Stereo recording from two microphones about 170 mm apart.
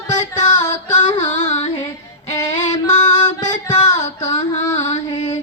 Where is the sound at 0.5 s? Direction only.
45° left (ahead or behind).